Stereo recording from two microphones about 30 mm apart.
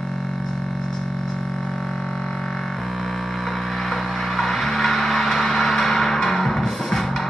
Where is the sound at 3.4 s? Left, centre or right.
Centre.